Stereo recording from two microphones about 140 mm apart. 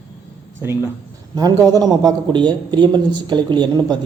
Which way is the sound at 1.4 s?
25° right (ahead or behind).